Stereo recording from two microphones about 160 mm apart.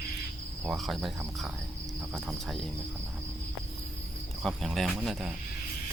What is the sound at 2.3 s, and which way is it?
Speech, centre (ahead or behind).